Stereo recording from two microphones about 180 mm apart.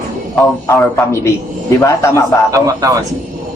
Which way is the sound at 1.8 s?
15° left (ahead or behind).